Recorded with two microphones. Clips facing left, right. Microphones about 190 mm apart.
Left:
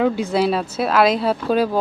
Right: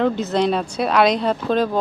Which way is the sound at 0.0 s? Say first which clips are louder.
Left 1 dB; 10° left (ahead or behind).